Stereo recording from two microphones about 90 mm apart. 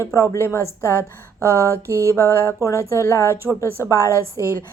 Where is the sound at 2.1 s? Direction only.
25° left (ahead or behind).